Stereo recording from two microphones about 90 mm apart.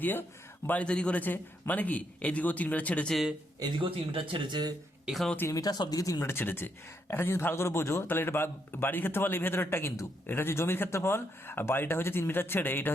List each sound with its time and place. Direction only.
0.0 s a man's voice: 25° left (ahead or behind)
3.6 s speech: 70° right (ahead or behind)
5.0 s speech: centre (ahead or behind)
5.5 s speech: 45° left (ahead or behind)
6.3 s a man's voice: 25° left (ahead or behind)